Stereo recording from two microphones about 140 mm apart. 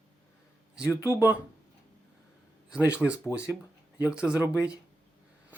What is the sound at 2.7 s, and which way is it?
Speech, 10° right (ahead or behind).